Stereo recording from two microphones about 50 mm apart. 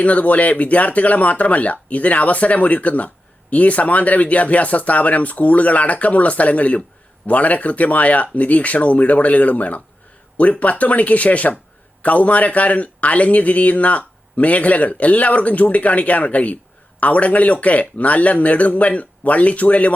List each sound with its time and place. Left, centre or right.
0.0 s speech: left